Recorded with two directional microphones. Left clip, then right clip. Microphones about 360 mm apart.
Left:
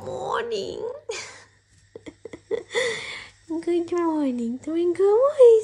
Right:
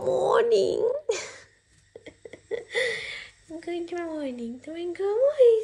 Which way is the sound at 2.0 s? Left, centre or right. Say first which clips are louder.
Left 4 dB; centre.